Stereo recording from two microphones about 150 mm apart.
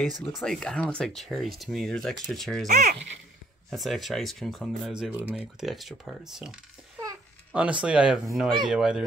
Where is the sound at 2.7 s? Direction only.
55° right (ahead or behind).